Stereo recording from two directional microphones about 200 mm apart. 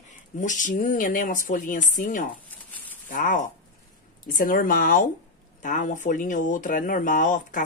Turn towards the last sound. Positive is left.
turn(degrees=40)  # may be behind; listen again after turning